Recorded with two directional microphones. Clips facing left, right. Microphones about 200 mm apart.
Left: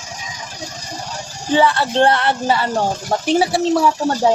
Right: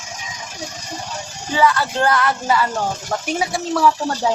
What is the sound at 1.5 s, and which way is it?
Speech, 30° left (ahead or behind).